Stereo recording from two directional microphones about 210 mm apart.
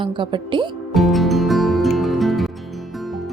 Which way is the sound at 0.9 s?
Centre (ahead or behind).